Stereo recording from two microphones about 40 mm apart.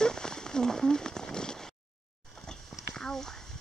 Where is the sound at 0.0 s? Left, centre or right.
Centre.